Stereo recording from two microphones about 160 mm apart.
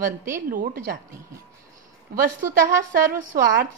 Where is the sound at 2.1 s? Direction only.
60° right (ahead or behind).